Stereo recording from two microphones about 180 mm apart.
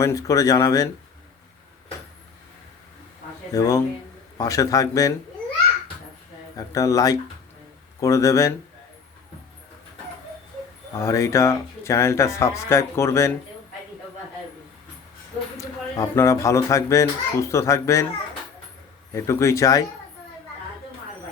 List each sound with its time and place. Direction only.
0.0 s speech: 20° left (ahead or behind)
3.5 s speech: 20° left (ahead or behind)
6.6 s speech: 20° left (ahead or behind)
10.9 s speech: 15° left (ahead or behind)
15.5 s speech: 15° left (ahead or behind)
19.1 s speech: 15° left (ahead or behind)